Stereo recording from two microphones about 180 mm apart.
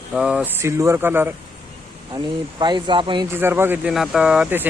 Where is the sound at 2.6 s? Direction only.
25° right (ahead or behind).